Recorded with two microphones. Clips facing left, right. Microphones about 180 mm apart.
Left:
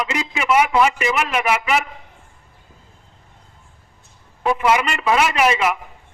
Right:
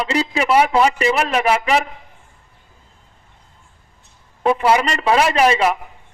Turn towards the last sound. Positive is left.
turn(degrees=-35)  # may be behind; listen again after turning